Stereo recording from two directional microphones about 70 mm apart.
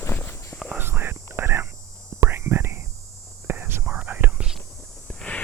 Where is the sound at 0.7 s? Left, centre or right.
Right.